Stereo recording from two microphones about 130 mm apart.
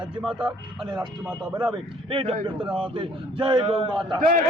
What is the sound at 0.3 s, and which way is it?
Speech, 10° right (ahead or behind).